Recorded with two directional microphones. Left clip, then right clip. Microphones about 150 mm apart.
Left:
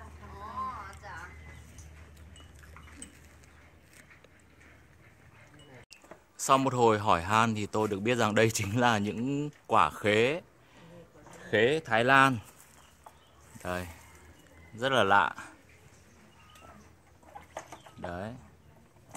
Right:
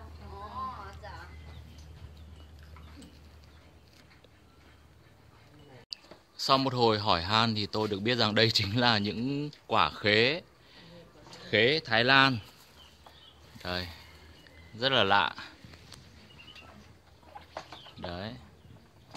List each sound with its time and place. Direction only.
0.6 s a sound: 35° right (ahead or behind)
6.4 s speech: 10° left (ahead or behind)
13.6 s speech: 10° left (ahead or behind)
18.0 s speech: 10° left (ahead or behind)